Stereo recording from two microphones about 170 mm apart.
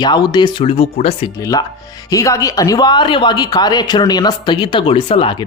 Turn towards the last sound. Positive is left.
turn(degrees=30)  # may be behind; listen again after turning